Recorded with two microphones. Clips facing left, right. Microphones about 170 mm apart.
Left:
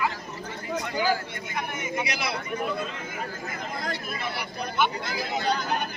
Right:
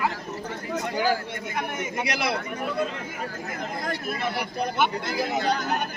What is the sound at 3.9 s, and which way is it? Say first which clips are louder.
Speech: right 4 dB; 50° right (ahead or behind).